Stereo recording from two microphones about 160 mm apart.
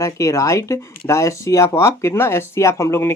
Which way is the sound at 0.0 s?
20° left (ahead or behind).